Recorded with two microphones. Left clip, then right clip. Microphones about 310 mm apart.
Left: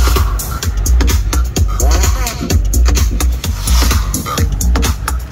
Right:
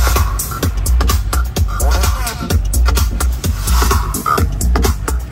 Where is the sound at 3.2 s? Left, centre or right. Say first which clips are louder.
Left 1 dB; centre.